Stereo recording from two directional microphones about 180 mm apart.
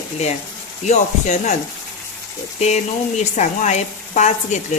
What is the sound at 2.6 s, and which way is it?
Speech, 35° left (ahead or behind).